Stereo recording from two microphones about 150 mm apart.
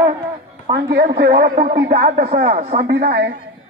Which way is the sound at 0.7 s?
90° right.